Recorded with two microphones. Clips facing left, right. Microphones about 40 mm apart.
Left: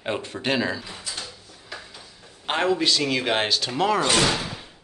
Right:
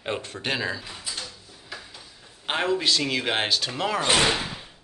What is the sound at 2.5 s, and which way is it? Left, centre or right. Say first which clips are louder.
Speech: left 2 dB; centre.